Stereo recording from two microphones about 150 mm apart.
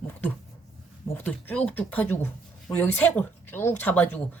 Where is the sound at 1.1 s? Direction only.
10° left (ahead or behind).